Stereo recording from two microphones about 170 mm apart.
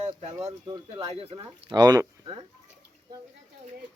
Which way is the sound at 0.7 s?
35° right (ahead or behind).